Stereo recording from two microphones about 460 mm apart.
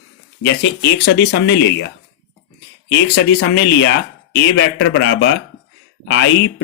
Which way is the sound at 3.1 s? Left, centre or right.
Left.